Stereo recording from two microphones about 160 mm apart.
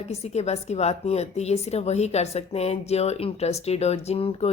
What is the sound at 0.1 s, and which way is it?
A woman's voice, 40° left (ahead or behind).